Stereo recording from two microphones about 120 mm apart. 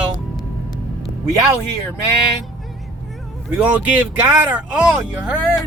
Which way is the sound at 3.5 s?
10° right (ahead or behind).